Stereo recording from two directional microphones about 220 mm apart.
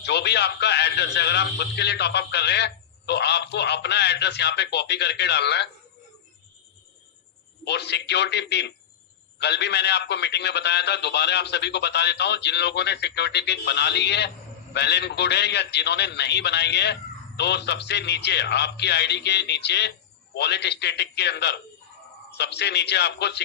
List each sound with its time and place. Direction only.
0.0 s a man's voice: 50° left (ahead or behind)
7.6 s a man's voice: 50° left (ahead or behind)